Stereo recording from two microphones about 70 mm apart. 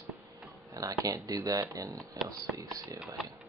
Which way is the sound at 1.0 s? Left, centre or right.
Right.